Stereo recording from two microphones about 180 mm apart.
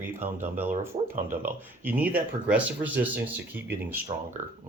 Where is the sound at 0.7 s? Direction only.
45° right (ahead or behind).